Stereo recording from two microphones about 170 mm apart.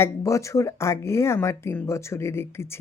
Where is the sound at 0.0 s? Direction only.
20° left (ahead or behind).